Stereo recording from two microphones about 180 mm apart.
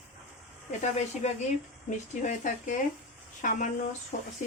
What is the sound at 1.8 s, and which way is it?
Speech, 40° left (ahead or behind).